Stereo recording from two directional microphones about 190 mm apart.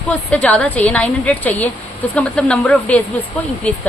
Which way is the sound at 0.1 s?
5° left (ahead or behind).